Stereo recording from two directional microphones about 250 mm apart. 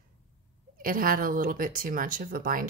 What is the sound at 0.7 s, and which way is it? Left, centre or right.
Speech, right.